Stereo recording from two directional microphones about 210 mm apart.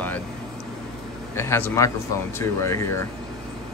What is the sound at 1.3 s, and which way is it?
Speech, 10° left (ahead or behind).